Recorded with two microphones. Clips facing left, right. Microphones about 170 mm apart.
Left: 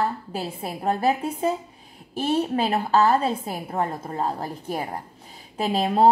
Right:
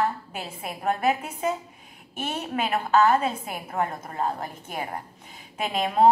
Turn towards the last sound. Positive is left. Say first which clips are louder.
# left 1 dB
turn(degrees=30)  # may be behind; listen again after turning